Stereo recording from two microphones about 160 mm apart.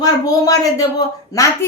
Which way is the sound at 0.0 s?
20° left (ahead or behind).